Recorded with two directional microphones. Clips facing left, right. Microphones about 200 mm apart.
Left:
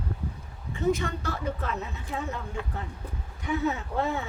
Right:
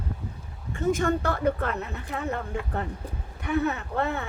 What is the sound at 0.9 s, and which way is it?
Speech, 50° right (ahead or behind).